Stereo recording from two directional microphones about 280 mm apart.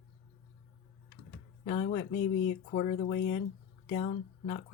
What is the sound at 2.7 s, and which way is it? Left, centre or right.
Speech, left.